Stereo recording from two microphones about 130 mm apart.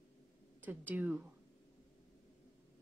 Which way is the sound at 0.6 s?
15° right (ahead or behind).